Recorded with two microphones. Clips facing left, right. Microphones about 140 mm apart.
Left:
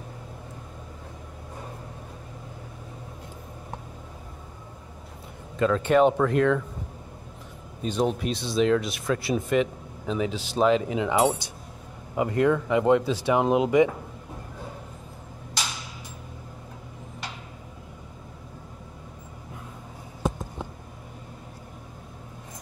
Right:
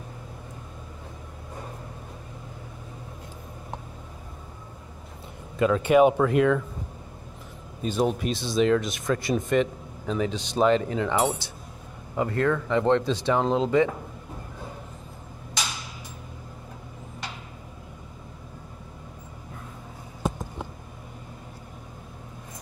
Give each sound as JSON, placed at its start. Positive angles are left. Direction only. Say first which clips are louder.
{"t": 5.6, "sound": "speech", "louder": "right 1 dB", "side_deg": -10}
{"t": 7.8, "sound": "speech", "louder": "right 1 dB", "side_deg": -5}